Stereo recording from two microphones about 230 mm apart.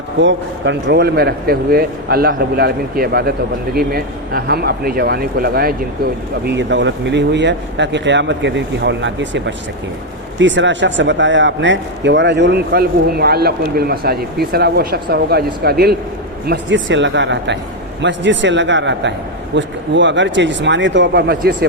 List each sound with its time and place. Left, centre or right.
0.2 s a man's voice: right